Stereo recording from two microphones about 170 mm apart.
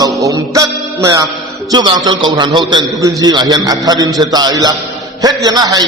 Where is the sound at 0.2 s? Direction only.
20° right (ahead or behind).